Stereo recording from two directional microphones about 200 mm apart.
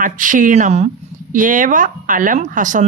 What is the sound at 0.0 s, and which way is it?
Speech, 40° right (ahead or behind).